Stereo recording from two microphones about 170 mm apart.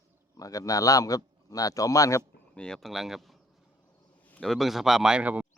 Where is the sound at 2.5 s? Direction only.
5° left (ahead or behind).